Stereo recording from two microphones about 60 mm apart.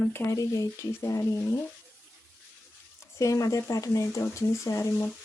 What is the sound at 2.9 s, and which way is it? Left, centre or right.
Speech, left.